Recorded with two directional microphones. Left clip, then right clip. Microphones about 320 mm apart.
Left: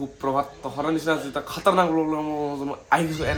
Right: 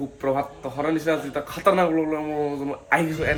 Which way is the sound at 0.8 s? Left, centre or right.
Centre.